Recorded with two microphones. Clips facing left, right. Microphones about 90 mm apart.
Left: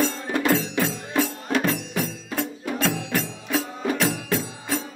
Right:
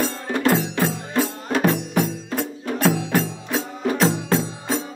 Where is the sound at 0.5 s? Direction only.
20° right (ahead or behind).